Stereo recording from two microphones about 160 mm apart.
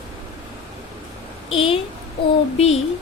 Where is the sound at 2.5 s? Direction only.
40° left (ahead or behind).